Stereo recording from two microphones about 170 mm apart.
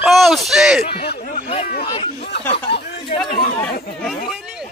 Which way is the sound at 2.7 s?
75° left (ahead or behind).